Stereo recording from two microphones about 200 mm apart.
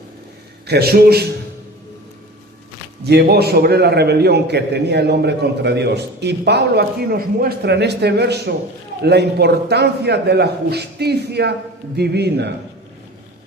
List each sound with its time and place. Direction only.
0.7 s a man's voice: 50° right (ahead or behind)
3.0 s a man's voice: 55° right (ahead or behind)